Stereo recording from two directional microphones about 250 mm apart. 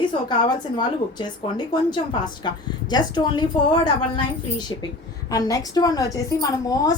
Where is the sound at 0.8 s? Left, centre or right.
Centre.